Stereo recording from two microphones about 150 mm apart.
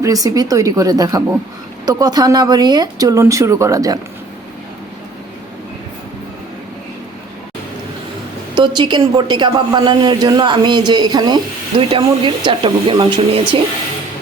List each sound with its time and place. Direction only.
0.0 s a woman's voice: 20° right (ahead or behind)
8.5 s a woman's voice: 30° right (ahead or behind)